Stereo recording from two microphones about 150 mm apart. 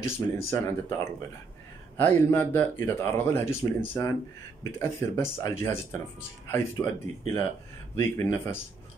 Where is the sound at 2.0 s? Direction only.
15° left (ahead or behind).